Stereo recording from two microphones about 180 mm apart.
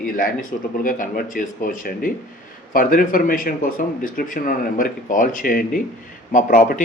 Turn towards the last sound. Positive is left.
turn(degrees=50)  # may be behind; listen again after turning